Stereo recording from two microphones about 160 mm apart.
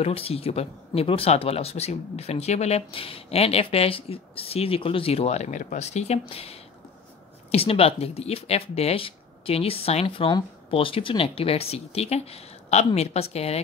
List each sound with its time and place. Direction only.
0.0 s speech: 40° left (ahead or behind)
7.5 s speech: 35° left (ahead or behind)